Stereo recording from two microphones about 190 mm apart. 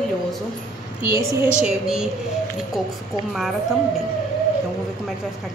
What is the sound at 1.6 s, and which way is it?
Speech, 5° right (ahead or behind).